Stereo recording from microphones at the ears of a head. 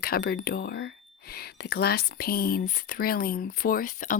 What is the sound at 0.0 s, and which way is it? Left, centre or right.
Speech, left.